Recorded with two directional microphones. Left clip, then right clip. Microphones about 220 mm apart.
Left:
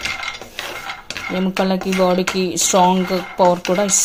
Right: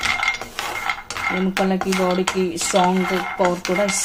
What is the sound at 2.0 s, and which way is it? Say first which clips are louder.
Speech: left 5 dB; 40° left (ahead or behind).